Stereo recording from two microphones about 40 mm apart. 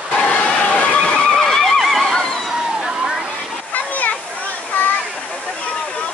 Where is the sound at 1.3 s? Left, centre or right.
Centre.